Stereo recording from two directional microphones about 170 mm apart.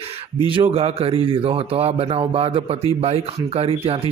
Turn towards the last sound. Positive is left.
turn(degrees=-35)  # may be behind; listen again after turning